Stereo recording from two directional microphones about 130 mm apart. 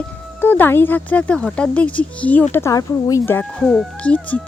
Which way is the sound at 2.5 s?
25° left (ahead or behind).